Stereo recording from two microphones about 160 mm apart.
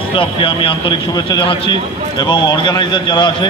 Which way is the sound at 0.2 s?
35° left (ahead or behind).